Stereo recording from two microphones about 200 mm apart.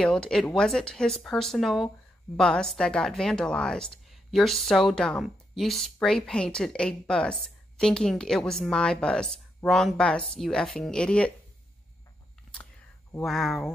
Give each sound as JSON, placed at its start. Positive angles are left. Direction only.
{"t": 0.0, "sound": "a woman's voice", "side_deg": 5}
{"t": 13.2, "sound": "a woman's voice", "side_deg": 0}